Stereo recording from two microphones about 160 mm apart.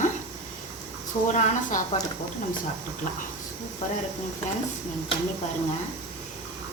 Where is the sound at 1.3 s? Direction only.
55° left (ahead or behind).